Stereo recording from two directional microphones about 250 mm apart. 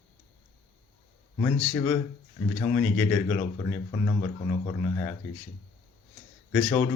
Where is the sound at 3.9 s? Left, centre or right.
Left.